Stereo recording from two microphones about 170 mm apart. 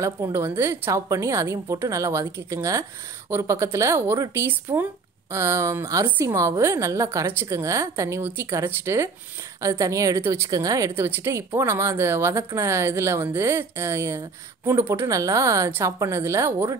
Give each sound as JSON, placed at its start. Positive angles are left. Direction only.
{"t": 0.0, "sound": "a woman's voice", "side_deg": -15}